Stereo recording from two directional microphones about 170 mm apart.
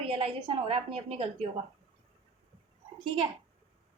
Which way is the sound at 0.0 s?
35° right (ahead or behind).